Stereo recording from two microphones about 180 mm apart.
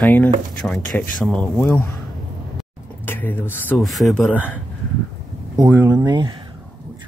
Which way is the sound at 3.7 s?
Centre (ahead or behind).